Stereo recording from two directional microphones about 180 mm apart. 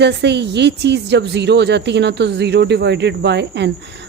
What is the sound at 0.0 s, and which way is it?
Speech, 70° right (ahead or behind).